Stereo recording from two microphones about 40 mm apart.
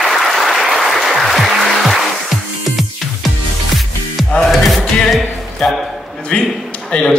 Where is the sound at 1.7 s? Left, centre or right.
Centre.